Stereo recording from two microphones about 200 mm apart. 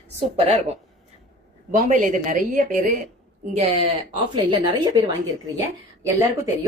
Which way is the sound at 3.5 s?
30° right (ahead or behind).